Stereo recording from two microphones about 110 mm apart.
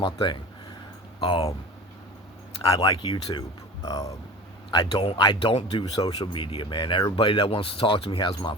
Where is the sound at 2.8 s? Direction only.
40° left (ahead or behind).